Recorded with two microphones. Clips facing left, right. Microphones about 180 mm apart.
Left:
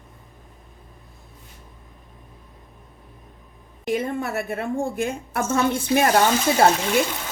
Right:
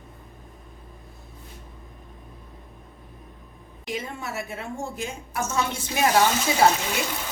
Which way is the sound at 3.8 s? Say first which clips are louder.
Left 8 dB; 55° left (ahead or behind).